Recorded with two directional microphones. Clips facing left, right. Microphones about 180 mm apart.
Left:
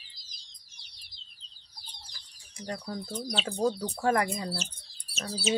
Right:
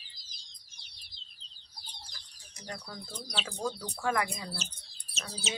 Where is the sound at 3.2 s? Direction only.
25° left (ahead or behind).